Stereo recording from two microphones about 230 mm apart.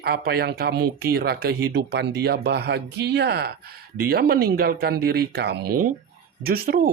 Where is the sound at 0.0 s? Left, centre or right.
Right.